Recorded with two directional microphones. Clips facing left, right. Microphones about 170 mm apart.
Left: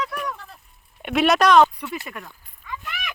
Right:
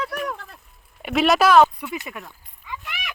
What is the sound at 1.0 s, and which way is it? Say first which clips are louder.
Speech: even; centre (ahead or behind).